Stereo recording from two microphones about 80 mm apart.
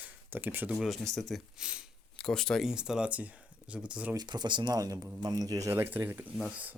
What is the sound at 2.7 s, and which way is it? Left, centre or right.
Speech, centre.